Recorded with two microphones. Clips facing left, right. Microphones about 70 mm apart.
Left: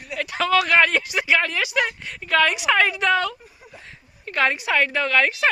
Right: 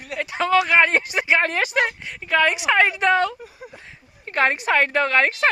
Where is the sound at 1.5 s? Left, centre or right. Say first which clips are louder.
Right 2 dB; right.